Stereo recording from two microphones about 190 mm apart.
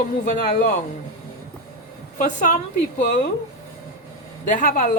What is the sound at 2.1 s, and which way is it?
A woman's voice, 45° left (ahead or behind).